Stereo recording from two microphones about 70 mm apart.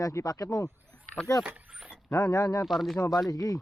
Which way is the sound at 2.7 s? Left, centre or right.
Centre.